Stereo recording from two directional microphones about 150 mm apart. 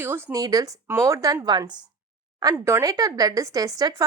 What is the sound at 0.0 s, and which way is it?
Speech, 20° right (ahead or behind).